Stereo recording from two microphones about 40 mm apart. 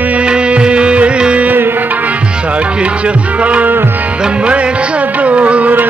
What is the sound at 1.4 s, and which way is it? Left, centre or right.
Tabla, right.